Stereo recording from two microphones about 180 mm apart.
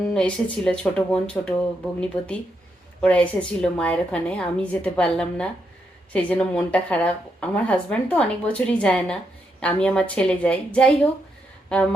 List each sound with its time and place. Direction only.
0.1 s a woman's voice: 5° left (ahead or behind)